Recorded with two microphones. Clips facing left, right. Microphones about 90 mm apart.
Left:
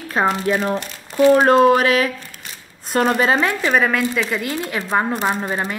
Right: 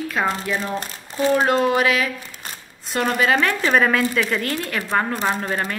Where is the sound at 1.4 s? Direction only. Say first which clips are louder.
Left 5 dB; 45° left (ahead or behind); by 3.4 s 30° left (ahead or behind).